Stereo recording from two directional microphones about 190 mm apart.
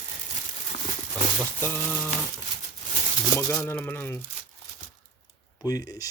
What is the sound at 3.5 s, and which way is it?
Speech, 10° left (ahead or behind).